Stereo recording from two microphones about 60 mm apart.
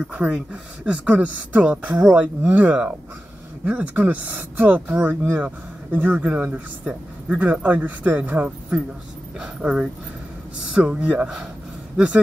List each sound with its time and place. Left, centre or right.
0.0 s speech: centre
9.4 s speech: centre
11.1 s speech: centre